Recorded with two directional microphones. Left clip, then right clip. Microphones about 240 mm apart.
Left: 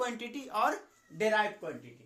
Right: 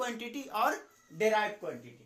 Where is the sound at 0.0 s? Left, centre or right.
Centre.